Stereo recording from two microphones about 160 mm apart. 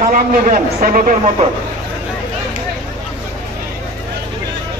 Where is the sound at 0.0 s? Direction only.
60° right (ahead or behind).